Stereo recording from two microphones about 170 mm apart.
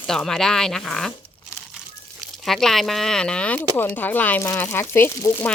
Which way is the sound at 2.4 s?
Centre (ahead or behind).